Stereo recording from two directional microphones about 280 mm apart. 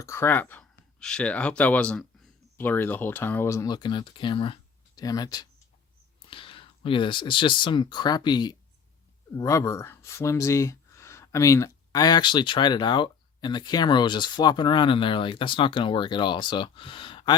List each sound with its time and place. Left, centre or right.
0.0 s speech: centre